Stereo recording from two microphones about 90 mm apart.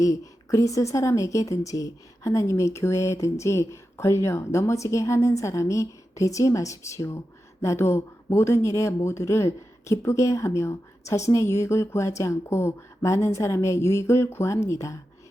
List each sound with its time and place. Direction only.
0.0 s speech: 35° left (ahead or behind)